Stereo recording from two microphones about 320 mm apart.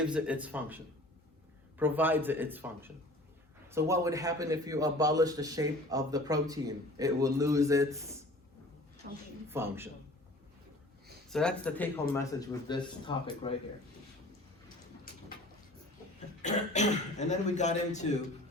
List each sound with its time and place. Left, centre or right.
0.0 s speech: centre
1.8 s a man's voice: centre
9.0 s a woman's voice: right
9.5 s a man's voice: centre
11.3 s speech: centre
16.4 s speech: left